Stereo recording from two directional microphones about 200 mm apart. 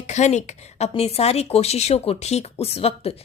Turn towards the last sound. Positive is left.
turn(degrees=30)  # may be behind; listen again after turning